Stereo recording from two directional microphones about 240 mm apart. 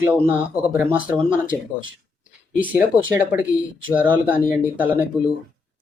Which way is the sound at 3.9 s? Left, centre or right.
Centre.